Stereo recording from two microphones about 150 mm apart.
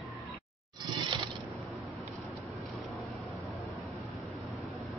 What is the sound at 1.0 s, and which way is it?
Mechanisms, 30° right (ahead or behind).